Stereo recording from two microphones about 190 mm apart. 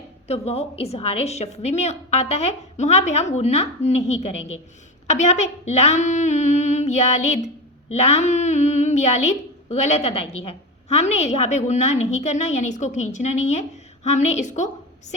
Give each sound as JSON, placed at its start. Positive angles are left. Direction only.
{"t": 0.3, "sound": "a woman's voice", "side_deg": 35}